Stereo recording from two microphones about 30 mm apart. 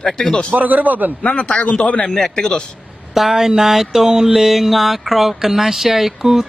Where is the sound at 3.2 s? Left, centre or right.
Centre.